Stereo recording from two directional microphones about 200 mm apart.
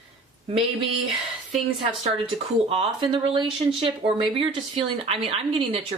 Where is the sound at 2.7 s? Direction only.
30° right (ahead or behind).